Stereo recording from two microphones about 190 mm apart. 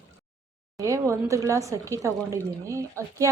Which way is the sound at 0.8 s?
15° right (ahead or behind).